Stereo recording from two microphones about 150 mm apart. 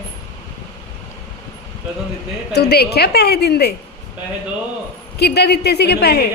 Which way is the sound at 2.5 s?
90° left.